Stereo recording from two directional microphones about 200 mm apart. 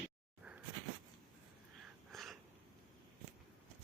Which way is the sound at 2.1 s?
Centre (ahead or behind).